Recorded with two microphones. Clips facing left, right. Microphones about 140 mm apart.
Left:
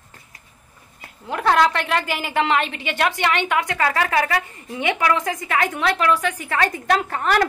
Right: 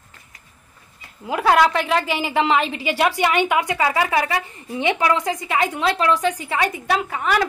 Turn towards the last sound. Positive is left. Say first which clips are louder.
# left 1 dB
turn(degrees=-5)  # may be behind; listen again after turning